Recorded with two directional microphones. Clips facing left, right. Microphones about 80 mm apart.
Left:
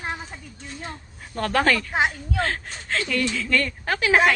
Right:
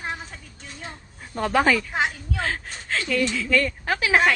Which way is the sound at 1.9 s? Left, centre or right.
Centre.